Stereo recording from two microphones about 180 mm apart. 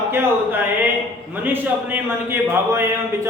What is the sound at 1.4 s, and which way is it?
A man's voice, 10° right (ahead or behind).